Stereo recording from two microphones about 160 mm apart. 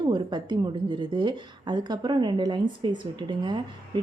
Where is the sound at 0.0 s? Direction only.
30° right (ahead or behind).